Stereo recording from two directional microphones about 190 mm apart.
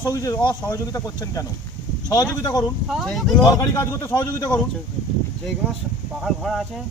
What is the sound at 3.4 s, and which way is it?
Speech, 15° left (ahead or behind).